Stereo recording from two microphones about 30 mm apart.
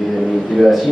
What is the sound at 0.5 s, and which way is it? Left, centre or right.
Speech, centre.